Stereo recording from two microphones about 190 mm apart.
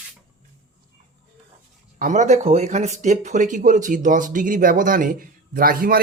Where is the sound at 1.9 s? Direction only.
40° right (ahead or behind).